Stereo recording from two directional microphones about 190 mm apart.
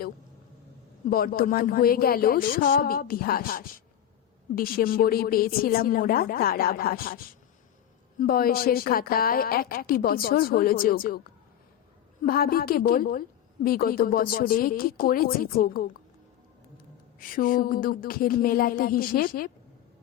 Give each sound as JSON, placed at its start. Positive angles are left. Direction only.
{"t": 1.1, "sound": "speech", "side_deg": 50}
{"t": 8.2, "sound": "speech", "side_deg": 50}